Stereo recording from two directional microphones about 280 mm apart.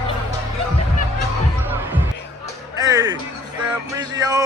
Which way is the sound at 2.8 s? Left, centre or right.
Centre.